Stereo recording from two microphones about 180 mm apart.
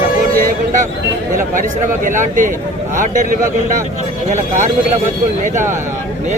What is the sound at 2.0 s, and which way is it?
A man's voice, 45° right (ahead or behind).